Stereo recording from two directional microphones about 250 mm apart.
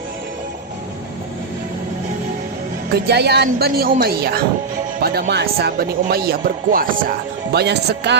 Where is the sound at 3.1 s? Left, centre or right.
Right.